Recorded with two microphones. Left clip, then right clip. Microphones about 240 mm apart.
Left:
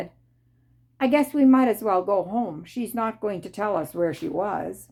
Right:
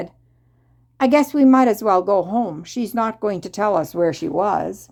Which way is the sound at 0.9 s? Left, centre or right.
Right.